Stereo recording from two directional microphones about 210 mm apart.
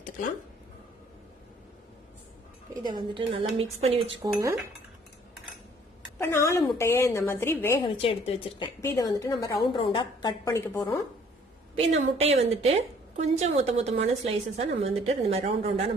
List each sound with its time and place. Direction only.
2.8 s a woman's voice: 25° right (ahead or behind)
4.2 s cutlery: 15° right (ahead or behind)
6.1 s a woman's voice: 10° left (ahead or behind)
7.9 s a woman's voice: 25° left (ahead or behind)
11.8 s a woman's voice: 30° right (ahead or behind)